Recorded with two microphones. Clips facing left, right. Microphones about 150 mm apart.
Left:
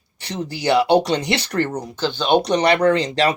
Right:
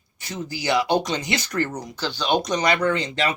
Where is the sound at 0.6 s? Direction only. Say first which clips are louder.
Left 6 dB; 60° left (ahead or behind).